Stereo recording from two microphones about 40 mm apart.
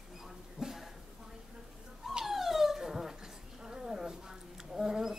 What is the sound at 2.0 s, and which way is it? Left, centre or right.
Dog, centre.